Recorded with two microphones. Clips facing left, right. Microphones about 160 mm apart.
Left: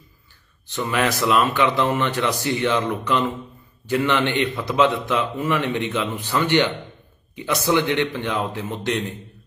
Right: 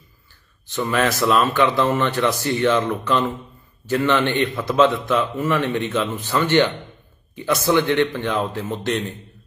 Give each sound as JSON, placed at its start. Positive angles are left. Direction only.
{"t": 0.7, "sound": "a man's voice", "side_deg": 15}